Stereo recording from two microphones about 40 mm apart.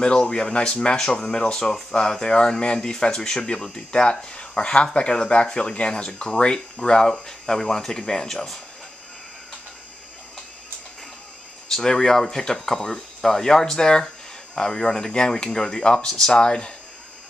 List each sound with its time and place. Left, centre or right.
0.0 s speech: centre
11.7 s speech: centre